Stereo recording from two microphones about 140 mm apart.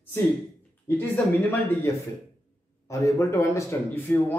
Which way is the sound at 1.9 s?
20° left (ahead or behind).